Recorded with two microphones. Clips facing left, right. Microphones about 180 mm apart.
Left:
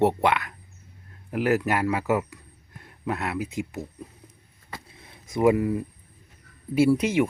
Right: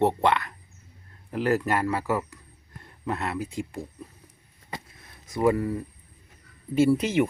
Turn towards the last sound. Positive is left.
turn(degrees=0)  # may be behind; listen again after turning